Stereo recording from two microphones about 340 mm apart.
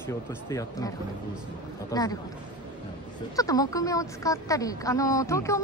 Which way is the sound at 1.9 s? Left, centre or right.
Centre.